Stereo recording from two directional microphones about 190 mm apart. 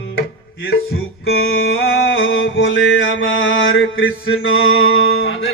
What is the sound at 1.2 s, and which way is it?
Mantra, 60° left (ahead or behind).